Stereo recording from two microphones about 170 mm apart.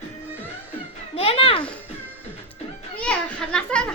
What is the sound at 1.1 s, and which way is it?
Music, 35° left (ahead or behind).